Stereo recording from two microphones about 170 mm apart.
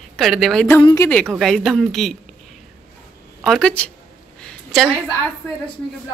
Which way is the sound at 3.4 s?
5° left (ahead or behind).